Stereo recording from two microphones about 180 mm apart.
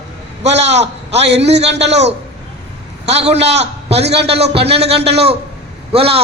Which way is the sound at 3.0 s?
35° right (ahead or behind).